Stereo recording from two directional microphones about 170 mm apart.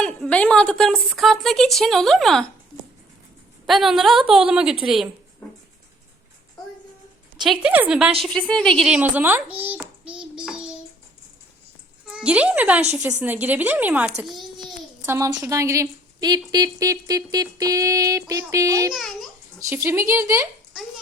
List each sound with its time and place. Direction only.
0.0 s a woman's voice: 5° left (ahead or behind)
3.7 s a woman's voice: centre (ahead or behind)
7.4 s a woman's voice: 5° right (ahead or behind)
9.0 s a child's voice: 10° right (ahead or behind)
12.0 s speech: 5° right (ahead or behind)
14.3 s babbling: centre (ahead or behind)
15.0 s a woman's voice: 15° right (ahead or behind)
18.9 s a woman's voice: centre (ahead or behind)
19.5 s speech: 15° right (ahead or behind)